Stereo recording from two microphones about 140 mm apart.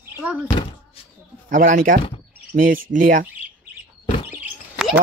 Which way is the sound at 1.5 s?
70° right (ahead or behind).